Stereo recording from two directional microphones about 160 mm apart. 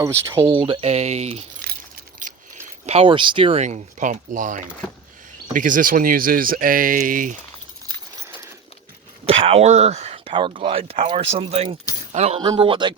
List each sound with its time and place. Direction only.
0.5 s speech: 35° right (ahead or behind)
2.2 s a sound: 50° right (ahead or behind)
2.6 s speech: 40° right (ahead or behind); by 7.3 s 60° right (ahead or behind)
9.2 s speech: 35° right (ahead or behind)
12.4 s speech: 30° right (ahead or behind)